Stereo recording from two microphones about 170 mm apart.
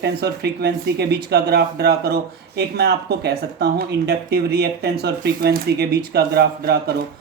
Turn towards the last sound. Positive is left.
turn(degrees=-70)  # may be behind; listen again after turning